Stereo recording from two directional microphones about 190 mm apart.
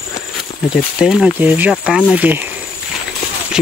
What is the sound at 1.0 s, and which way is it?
Speech, 5° right (ahead or behind).